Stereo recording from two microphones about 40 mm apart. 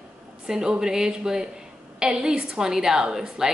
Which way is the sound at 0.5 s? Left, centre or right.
Centre.